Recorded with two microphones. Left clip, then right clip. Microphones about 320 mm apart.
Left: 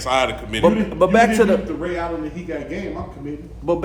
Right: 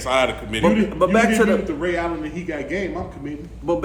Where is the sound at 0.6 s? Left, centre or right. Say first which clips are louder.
Left 2 dB; left.